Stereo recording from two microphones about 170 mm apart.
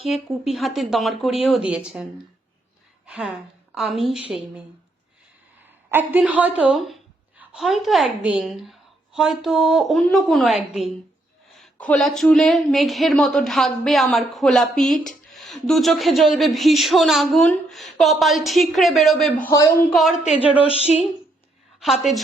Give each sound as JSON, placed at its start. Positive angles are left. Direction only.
{"t": 0.1, "sound": "speech", "side_deg": 0}
{"t": 3.1, "sound": "speech", "side_deg": -5}
{"t": 5.6, "sound": "speech", "side_deg": -10}
{"t": 19.5, "sound": "a man's voice", "side_deg": 20}
{"t": 19.9, "sound": "speech", "side_deg": 0}
{"t": 20.7, "sound": "speech", "side_deg": 35}